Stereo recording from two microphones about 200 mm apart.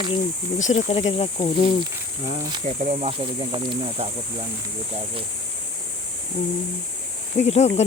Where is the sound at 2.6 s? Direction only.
35° right (ahead or behind).